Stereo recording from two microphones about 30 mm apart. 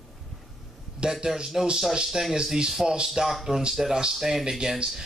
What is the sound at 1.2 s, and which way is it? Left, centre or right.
Speech, right.